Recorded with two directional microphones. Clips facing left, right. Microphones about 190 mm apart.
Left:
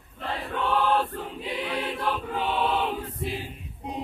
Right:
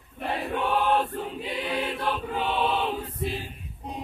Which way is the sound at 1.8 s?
Centre (ahead or behind).